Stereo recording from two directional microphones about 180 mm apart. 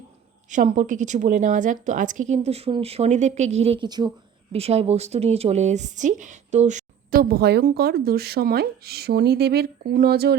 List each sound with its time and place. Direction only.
0.5 s a woman's voice: 45° right (ahead or behind); by 4.1 s 25° right (ahead or behind)
4.5 s speech: 35° right (ahead or behind); by 10.3 s 60° right (ahead or behind)